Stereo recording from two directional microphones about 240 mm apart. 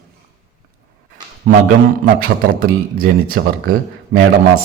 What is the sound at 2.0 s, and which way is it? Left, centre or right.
Speech, right.